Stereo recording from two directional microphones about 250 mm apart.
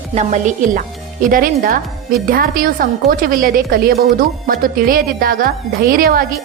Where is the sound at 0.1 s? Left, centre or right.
Right.